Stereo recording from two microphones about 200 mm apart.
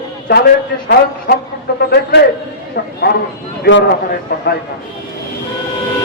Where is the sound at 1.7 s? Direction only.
55° left (ahead or behind).